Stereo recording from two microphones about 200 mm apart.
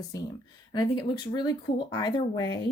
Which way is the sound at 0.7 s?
20° left (ahead or behind).